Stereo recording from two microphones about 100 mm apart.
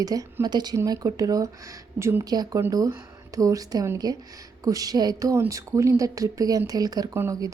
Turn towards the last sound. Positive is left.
turn(degrees=-35)  # may be behind; listen again after turning